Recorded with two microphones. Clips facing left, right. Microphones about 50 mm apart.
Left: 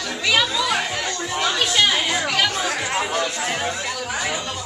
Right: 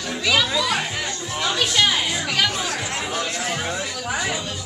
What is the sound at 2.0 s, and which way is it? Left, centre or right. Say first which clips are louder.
Chatter: left 3 dB; left.